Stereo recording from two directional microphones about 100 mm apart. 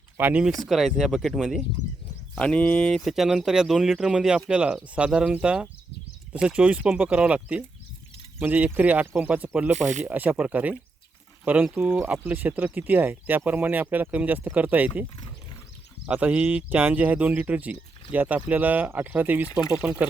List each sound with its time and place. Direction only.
0.2 s speech: 20° right (ahead or behind)
0.6 s speech: centre (ahead or behind)
2.3 s speech: 10° left (ahead or behind); by 15.0 s 15° right (ahead or behind)
16.0 s speech: 15° right (ahead or behind)